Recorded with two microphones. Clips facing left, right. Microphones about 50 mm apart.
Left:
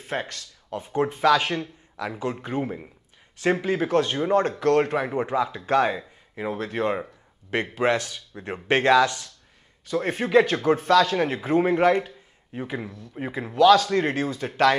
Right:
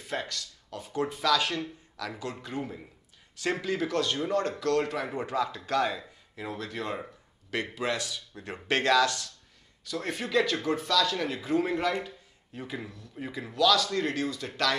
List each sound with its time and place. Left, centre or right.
0.0 s speech: left